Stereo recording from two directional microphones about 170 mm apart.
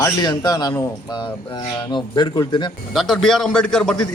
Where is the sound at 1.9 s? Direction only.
25° left (ahead or behind).